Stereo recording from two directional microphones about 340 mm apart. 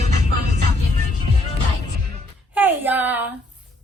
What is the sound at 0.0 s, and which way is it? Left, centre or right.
Music, centre.